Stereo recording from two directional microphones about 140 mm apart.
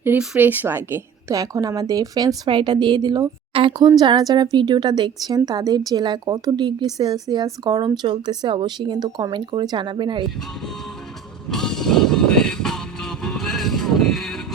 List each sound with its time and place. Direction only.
0.2 s a woman's voice: 10° right (ahead or behind); by 10.2 s 35° right (ahead or behind)
11.4 s music: 5° left (ahead or behind)